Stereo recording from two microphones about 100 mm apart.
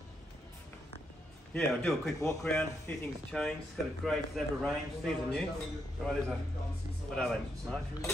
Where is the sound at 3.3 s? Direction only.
5° left (ahead or behind).